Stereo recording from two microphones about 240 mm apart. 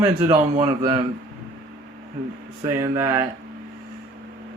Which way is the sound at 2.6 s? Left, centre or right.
Centre.